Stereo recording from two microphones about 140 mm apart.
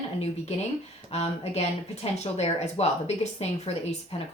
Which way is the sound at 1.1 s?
50° left (ahead or behind).